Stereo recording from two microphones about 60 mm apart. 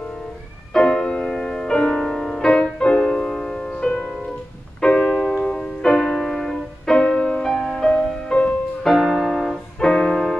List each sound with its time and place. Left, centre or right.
0.7 s music: centre
8.9 s music: centre